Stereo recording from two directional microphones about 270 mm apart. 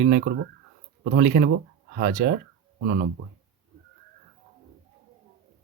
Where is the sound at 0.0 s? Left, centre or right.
Right.